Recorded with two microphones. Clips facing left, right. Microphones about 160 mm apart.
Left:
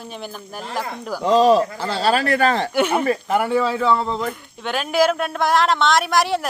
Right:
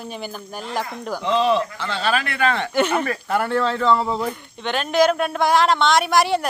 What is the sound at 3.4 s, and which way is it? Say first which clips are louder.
Speech: left 1 dB; 10° left (ahead or behind).